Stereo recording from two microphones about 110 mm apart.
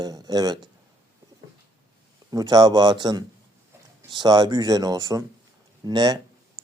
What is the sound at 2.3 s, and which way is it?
Speech, 35° right (ahead or behind).